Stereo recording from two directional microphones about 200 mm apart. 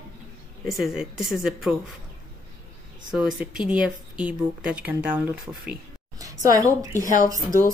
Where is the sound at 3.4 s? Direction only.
5° right (ahead or behind).